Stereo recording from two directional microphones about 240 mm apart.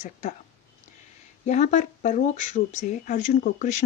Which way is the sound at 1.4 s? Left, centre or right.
Left.